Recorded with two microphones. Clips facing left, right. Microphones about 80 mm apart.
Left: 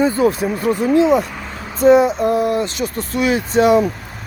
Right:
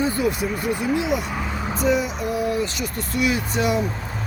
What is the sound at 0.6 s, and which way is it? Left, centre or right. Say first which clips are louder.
Speech: left 10 dB; centre.